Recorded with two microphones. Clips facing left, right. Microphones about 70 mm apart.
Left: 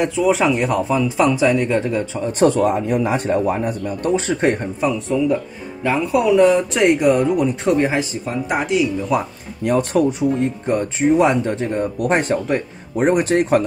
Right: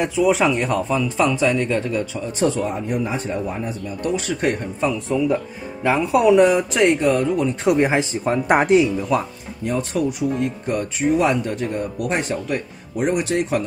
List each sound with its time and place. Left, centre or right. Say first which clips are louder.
0.0 s speech: left 1 dB; centre; by 2.2 s left
2.3 s speech: left 6 dB; left
4.0 s speech: left 4 dB; left
4.7 s speech: left 2 dB; centre
5.9 s speech: right 1 dB; right
6.7 s speech: left 1 dB; centre
7.0 s speech: left 3 dB; centre
7.6 s speech: right 2 dB; centre
8.3 s speech: right 7 dB; right
9.1 s speech: left 1 dB; centre
9.7 s speech: left 6 dB; left
10.0 s speech: left 3 dB; left